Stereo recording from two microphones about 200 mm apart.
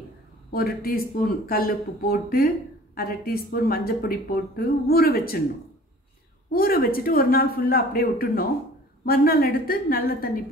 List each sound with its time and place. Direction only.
0.5 s speech: 50° left (ahead or behind)
6.5 s speech: 45° left (ahead or behind)